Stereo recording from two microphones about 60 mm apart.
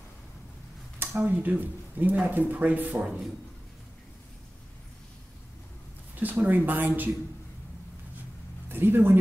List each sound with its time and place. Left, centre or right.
0.9 s speech: right
6.1 s speech: right
8.6 s speech: right